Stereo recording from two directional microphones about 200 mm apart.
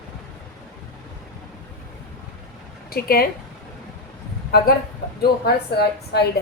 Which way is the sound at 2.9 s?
50° left (ahead or behind).